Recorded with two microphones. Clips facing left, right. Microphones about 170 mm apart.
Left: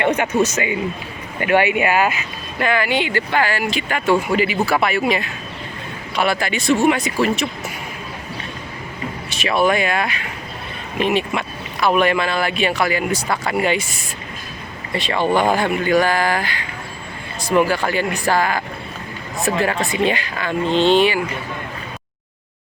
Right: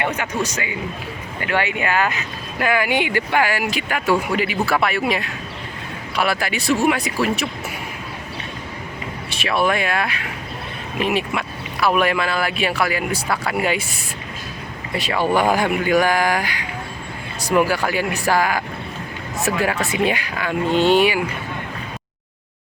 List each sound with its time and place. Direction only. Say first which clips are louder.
0.0 s speech: left 5 dB; 25° left (ahead or behind)
1.4 s speech: left 6 dB; 15° left (ahead or behind)
2.6 s speech: even; 10° right (ahead or behind)
9.4 s speech: left 3 dB; centre (ahead or behind)
14.9 s speech: left 1 dB; 5° right (ahead or behind)